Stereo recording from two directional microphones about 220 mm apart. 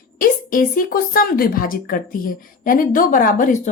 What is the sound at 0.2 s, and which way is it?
Speech, 40° left (ahead or behind).